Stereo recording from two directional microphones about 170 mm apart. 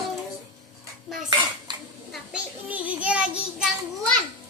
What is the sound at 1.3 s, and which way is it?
Dishes, 25° right (ahead or behind).